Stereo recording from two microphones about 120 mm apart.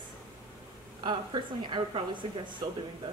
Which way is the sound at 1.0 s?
40° right (ahead or behind).